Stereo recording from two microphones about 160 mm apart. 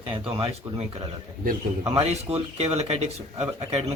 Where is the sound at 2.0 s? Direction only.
40° right (ahead or behind).